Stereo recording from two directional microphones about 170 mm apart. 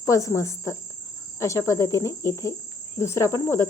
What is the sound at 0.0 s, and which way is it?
Cricket, 20° left (ahead or behind).